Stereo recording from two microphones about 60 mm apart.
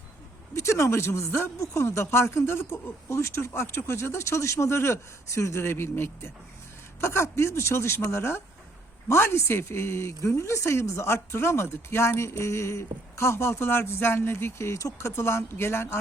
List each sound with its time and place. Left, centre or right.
0.5 s a man's voice: left